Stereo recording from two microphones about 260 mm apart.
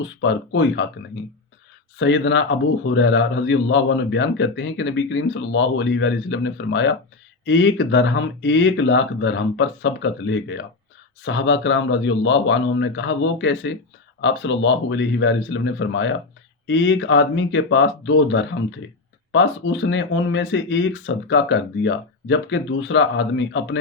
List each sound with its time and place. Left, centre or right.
0.0 s a man's voice: left
2.0 s a man's voice: left